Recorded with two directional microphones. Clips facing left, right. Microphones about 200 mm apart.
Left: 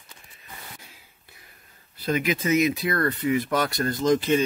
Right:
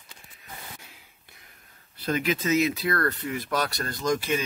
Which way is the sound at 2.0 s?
15° left (ahead or behind).